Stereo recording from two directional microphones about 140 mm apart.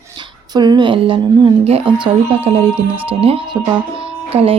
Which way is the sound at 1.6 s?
45° right (ahead or behind).